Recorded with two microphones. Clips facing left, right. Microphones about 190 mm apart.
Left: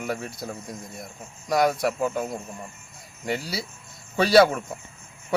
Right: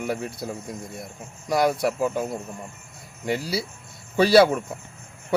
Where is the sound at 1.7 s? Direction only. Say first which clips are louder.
Right 1 dB; 30° right (ahead or behind).